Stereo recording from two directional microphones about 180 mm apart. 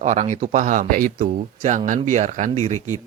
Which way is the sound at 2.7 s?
15° left (ahead or behind).